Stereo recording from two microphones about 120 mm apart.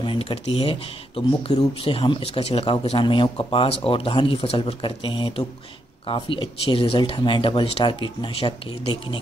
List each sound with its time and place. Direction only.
0.0 s speech: 45° left (ahead or behind)